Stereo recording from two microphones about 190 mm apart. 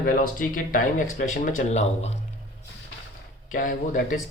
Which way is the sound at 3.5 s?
45° left (ahead or behind).